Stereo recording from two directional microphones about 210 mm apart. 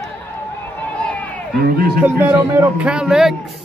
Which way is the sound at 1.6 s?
45° right (ahead or behind).